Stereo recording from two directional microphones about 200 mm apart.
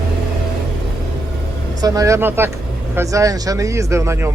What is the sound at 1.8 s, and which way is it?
Speech, 15° right (ahead or behind).